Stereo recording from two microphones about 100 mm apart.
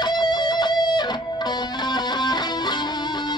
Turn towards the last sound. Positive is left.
turn(degrees=45)  # may be behind; listen again after turning